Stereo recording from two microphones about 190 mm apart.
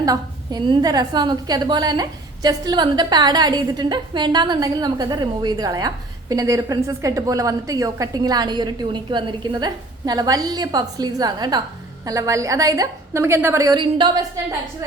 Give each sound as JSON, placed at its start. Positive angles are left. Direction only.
{"t": 0.0, "sound": "a woman's voice", "side_deg": -20}